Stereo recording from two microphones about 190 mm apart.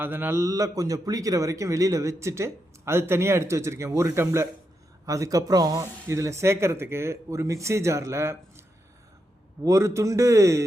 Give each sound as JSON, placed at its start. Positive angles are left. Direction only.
{"t": 0.0, "sound": "a man's voice", "side_deg": -10}
{"t": 9.6, "sound": "a man's voice", "side_deg": -15}